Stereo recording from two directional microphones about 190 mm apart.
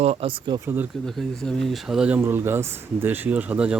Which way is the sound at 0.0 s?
30° right (ahead or behind).